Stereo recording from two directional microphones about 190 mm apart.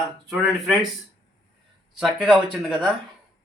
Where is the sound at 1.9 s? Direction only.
Centre (ahead or behind).